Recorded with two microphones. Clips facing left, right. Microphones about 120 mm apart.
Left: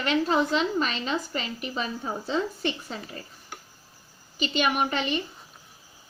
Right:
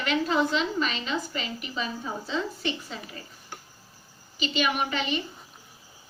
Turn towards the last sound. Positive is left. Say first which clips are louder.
# left 2 dB
turn(degrees=45)  # may be behind; listen again after turning